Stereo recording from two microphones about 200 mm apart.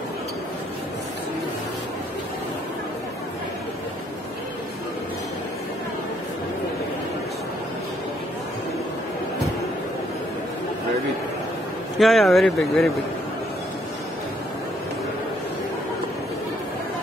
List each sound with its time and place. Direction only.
12.0 s speech: centre (ahead or behind)